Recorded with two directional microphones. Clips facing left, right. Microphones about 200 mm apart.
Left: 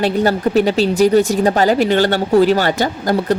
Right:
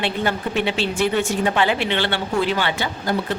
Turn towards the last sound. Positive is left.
turn(degrees=40)  # may be behind; listen again after turning